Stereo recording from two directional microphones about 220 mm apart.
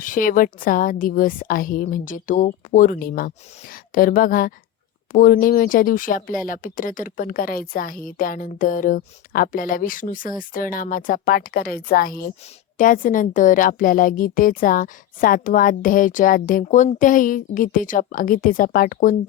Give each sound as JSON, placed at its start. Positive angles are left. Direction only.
{"t": 0.0, "sound": "speech", "side_deg": 40}